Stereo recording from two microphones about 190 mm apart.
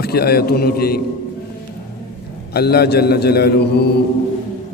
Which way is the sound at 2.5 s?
55° left (ahead or behind).